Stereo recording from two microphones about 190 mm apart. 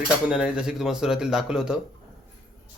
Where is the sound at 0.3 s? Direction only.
5° right (ahead or behind).